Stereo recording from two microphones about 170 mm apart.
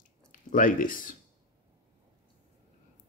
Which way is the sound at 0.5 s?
55° left (ahead or behind).